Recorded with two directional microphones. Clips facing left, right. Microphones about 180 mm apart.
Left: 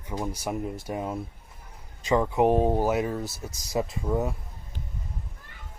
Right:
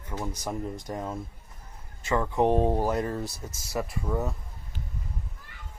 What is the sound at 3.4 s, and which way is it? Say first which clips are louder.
Speech: left 3 dB; 15° left (ahead or behind).